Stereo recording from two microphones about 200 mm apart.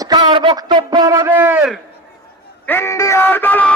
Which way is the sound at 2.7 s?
15° left (ahead or behind).